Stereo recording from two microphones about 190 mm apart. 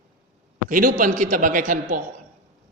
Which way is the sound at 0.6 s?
45° right (ahead or behind).